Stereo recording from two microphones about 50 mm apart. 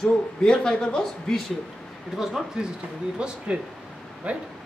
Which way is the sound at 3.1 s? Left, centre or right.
Centre.